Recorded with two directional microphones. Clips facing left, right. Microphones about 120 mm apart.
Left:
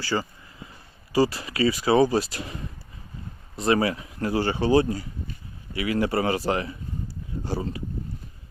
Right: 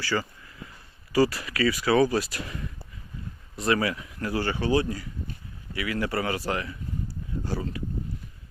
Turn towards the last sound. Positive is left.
turn(degrees=25)  # may be behind; listen again after turning